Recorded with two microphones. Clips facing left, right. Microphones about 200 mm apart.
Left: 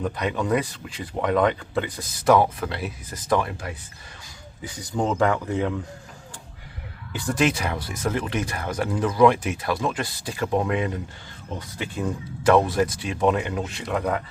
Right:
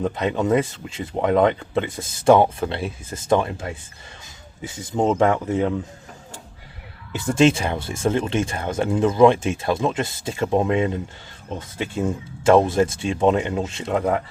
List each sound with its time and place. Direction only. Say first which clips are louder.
0.0 s speech: right 4 dB; 25° right (ahead or behind)
7.1 s speech: right 6 dB; 25° right (ahead or behind)